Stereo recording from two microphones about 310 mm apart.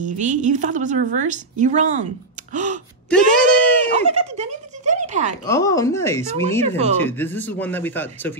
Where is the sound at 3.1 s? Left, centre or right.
Centre.